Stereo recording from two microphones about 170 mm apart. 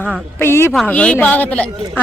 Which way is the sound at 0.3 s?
15° left (ahead or behind).